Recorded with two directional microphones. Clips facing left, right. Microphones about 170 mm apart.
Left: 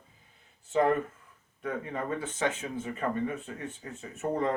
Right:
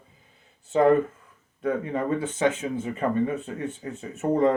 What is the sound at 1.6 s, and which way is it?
Speech, 25° right (ahead or behind).